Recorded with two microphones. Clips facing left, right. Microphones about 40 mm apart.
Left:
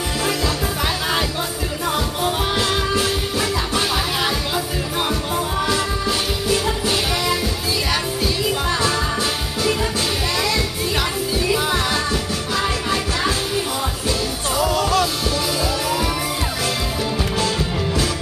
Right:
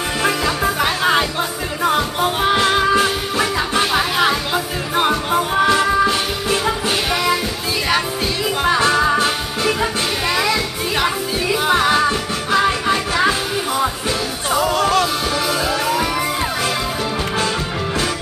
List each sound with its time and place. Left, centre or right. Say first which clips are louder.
0.5 s music: right 4 dB; centre
8.6 s music: right 6 dB; right